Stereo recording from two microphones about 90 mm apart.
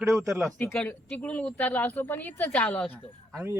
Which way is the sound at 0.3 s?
30° right (ahead or behind).